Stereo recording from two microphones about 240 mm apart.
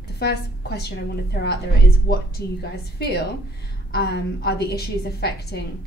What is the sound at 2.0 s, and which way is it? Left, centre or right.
A woman's voice, left.